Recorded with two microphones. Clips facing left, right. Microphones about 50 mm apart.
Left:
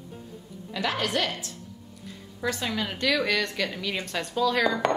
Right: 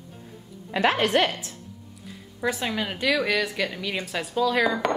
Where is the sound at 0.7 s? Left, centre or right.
Right.